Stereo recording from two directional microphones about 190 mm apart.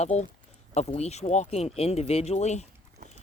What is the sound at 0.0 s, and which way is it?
Speech, 35° left (ahead or behind).